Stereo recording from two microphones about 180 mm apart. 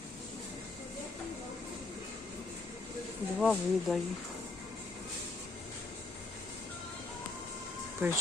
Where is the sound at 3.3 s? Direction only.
Centre (ahead or behind).